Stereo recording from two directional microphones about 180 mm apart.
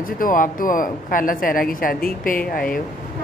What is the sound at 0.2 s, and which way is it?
Speech, 50° left (ahead or behind).